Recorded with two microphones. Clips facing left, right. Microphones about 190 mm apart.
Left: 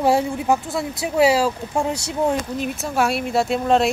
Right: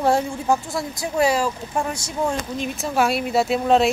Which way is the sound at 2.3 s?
5° left (ahead or behind).